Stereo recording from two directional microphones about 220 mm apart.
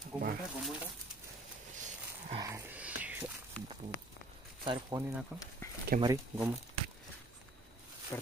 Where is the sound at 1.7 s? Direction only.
35° right (ahead or behind).